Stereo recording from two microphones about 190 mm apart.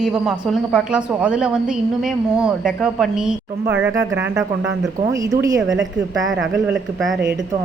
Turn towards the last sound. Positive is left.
turn(degrees=-5)  # may be behind; listen again after turning